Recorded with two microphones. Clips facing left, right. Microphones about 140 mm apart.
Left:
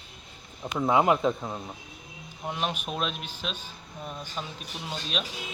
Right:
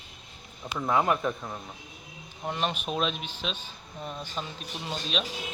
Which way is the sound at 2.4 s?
5° left (ahead or behind).